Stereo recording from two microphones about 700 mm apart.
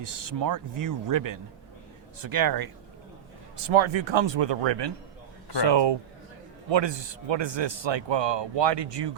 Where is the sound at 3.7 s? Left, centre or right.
Right.